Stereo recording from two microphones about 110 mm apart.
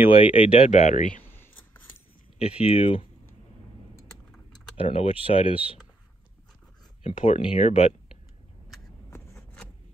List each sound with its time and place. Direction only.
0.1 s speech: 55° left (ahead or behind); by 1.0 s 90° left
2.3 s speech: 65° left (ahead or behind)
4.7 s speech: 55° left (ahead or behind)
7.0 s speech: 65° left (ahead or behind)